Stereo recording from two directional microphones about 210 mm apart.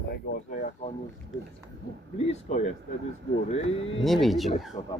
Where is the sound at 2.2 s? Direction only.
30° left (ahead or behind).